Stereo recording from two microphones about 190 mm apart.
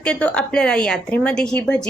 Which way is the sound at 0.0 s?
5° left (ahead or behind).